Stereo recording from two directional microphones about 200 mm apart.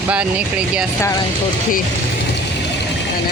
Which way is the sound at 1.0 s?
15° left (ahead or behind).